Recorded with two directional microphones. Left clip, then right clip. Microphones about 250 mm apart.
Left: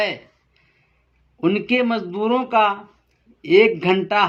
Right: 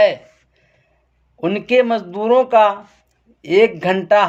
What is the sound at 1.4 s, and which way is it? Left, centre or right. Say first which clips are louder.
Speech: right 4 dB; right.